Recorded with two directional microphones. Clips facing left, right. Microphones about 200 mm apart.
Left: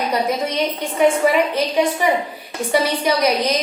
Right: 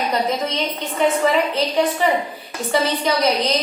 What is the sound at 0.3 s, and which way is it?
A woman's voice, 10° left (ahead or behind).